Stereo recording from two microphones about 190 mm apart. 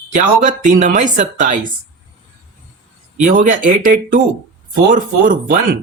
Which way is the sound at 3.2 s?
40° right (ahead or behind).